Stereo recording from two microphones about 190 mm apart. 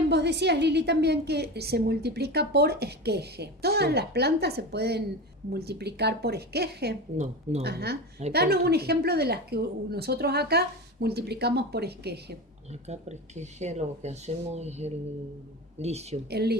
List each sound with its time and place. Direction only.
0.1 s a woman's voice: 60° right (ahead or behind)
12.9 s speech: 35° right (ahead or behind)
16.3 s a woman's voice: 60° right (ahead or behind)